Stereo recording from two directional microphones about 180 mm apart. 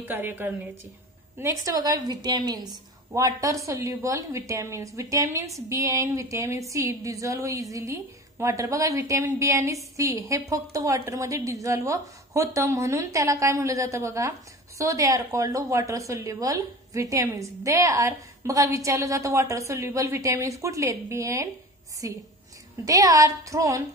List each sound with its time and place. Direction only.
0.0 s a woman's voice: 10° right (ahead or behind)
21.9 s a sound: 20° right (ahead or behind)
22.8 s a woman's voice: 20° right (ahead or behind)